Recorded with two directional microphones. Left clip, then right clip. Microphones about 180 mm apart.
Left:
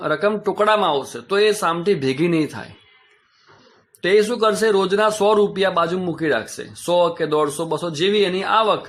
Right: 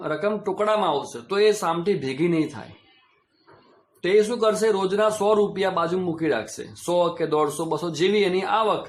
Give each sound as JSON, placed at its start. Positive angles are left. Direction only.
{"t": 0.0, "sound": "speech", "side_deg": 20}
{"t": 4.0, "sound": "a man's voice", "side_deg": 15}